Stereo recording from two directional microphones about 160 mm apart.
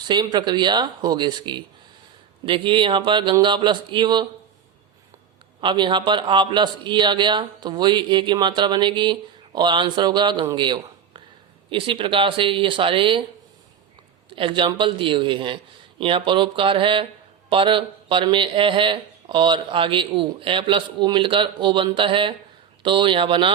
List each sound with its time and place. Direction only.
0.0 s a man's voice: 25° right (ahead or behind)
5.5 s a man's voice: 30° right (ahead or behind)
14.3 s speech: 30° right (ahead or behind)